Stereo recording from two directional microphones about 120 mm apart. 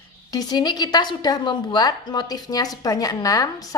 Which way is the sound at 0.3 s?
35° left (ahead or behind).